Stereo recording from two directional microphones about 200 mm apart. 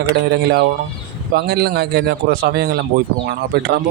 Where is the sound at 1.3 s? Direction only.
55° right (ahead or behind).